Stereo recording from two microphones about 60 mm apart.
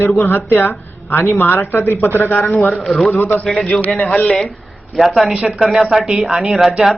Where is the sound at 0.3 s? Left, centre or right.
Left.